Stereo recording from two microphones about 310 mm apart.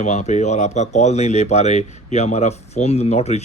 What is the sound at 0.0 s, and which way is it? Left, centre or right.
Speech, left.